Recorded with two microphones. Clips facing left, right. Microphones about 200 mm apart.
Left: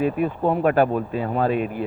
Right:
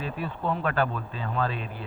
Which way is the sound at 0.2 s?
50° left (ahead or behind).